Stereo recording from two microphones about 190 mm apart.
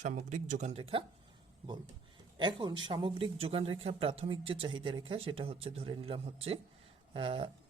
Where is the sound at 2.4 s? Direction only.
25° right (ahead or behind).